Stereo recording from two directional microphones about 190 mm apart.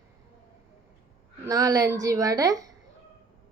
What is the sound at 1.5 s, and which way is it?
A woman's voice, 15° right (ahead or behind).